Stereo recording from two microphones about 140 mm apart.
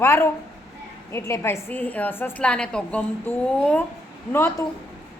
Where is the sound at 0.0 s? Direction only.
20° left (ahead or behind).